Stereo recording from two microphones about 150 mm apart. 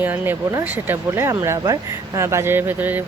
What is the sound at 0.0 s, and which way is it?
Speech, 10° right (ahead or behind).